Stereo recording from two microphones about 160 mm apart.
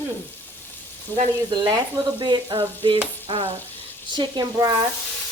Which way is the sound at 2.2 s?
30° right (ahead or behind).